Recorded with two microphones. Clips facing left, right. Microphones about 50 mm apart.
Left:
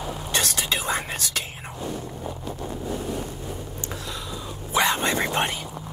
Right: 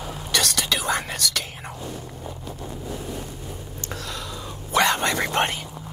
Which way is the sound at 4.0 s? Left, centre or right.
Right.